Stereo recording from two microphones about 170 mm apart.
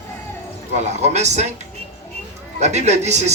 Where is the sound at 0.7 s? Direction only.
40° right (ahead or behind).